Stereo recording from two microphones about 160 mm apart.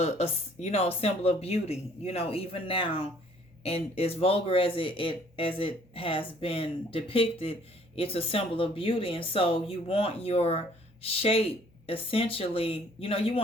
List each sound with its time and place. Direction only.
0.0 s speech: 40° left (ahead or behind)